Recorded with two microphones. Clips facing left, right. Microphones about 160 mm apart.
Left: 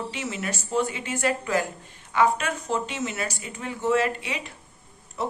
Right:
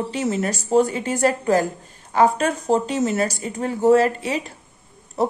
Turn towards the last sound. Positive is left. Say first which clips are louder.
# right 8 dB
turn(degrees=-40)  # may be behind; listen again after turning